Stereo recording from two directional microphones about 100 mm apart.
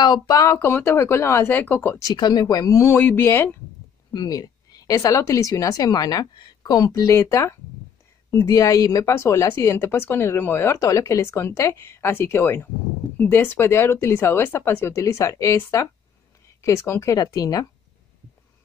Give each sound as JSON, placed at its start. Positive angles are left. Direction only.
{"t": 0.0, "sound": "a woman's voice", "side_deg": 40}
{"t": 0.6, "sound": "speech", "side_deg": 25}
{"t": 2.0, "sound": "a woman's voice", "side_deg": 40}
{"t": 4.1, "sound": "a woman's voice", "side_deg": 40}
{"t": 17.2, "sound": "a woman's voice", "side_deg": 35}